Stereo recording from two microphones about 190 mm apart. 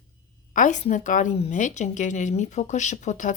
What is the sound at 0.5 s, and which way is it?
Speech, 40° left (ahead or behind).